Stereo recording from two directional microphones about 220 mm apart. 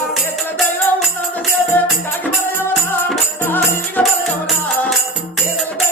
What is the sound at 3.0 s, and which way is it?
Music, centre (ahead or behind).